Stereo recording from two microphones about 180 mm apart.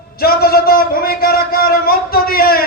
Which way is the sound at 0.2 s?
60° left (ahead or behind).